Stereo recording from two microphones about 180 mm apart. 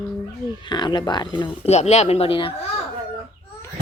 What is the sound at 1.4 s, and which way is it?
Speech, 35° left (ahead or behind).